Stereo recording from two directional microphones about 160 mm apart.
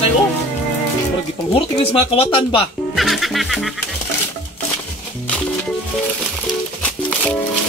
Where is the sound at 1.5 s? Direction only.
35° left (ahead or behind).